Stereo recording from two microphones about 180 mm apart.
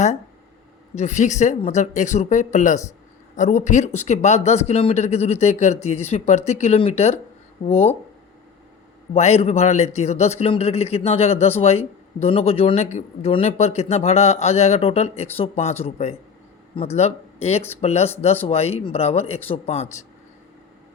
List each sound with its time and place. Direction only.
0.9 s speech: 40° left (ahead or behind)
9.1 s speech: 35° left (ahead or behind)